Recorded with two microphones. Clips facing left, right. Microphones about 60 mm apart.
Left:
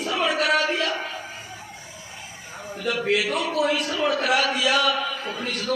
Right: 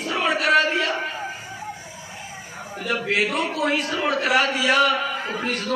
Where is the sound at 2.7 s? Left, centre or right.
Right.